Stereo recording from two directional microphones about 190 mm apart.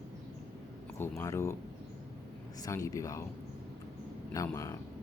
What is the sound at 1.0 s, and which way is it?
Speech, 15° left (ahead or behind).